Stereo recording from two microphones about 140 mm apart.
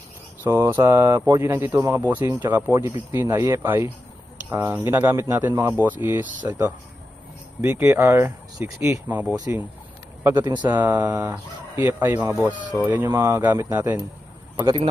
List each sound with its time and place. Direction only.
0.4 s speech: 20° right (ahead or behind)
10.3 s speech: 30° right (ahead or behind)
11.1 s speech: 10° right (ahead or behind)